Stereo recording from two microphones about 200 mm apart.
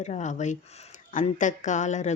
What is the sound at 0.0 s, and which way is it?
Speech, 35° left (ahead or behind).